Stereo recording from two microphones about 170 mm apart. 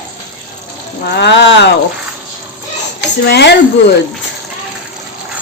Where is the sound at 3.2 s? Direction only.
75° left (ahead or behind).